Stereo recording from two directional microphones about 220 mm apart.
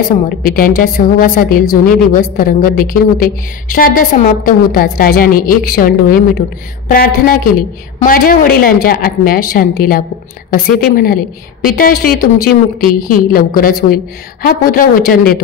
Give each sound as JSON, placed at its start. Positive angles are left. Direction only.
{"t": 0.4, "sound": "a woman's voice", "side_deg": 40}